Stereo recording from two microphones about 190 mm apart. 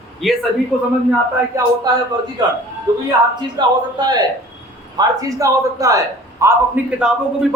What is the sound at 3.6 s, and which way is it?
A man's voice, 20° right (ahead or behind).